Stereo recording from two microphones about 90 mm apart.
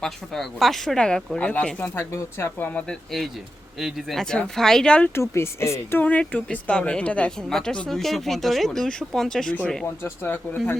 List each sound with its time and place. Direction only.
0.0 s a woman's voice: 5° left (ahead or behind)
1.8 s speech: 25° left (ahead or behind)
2.6 s a woman's voice: 15° left (ahead or behind)
3.8 s speech: 5° right (ahead or behind)
5.1 s speech: 30° left (ahead or behind)
6.0 s a woman's voice: 15° left (ahead or behind)
9.8 s speech: 25° left (ahead or behind)